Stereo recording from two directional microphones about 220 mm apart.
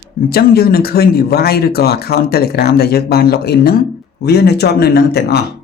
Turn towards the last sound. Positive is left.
turn(degrees=45)  # may be behind; listen again after turning